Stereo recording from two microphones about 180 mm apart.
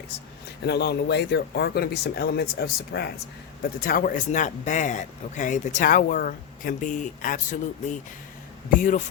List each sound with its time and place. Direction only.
0.6 s speech: 70° left (ahead or behind)
3.6 s speech: 55° left (ahead or behind)
8.7 s speech: 50° left (ahead or behind)